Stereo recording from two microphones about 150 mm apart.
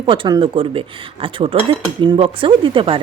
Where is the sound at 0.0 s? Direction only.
35° right (ahead or behind).